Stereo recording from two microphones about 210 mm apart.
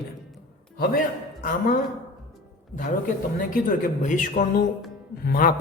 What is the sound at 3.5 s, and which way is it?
A man's voice, 40° left (ahead or behind).